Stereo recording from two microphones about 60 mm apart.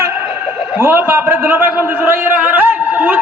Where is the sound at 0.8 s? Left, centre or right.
Right.